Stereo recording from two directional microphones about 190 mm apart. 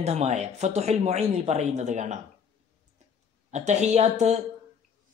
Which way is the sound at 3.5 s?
35° right (ahead or behind).